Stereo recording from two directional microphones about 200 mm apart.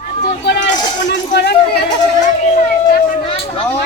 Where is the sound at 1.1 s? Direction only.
55° left (ahead or behind).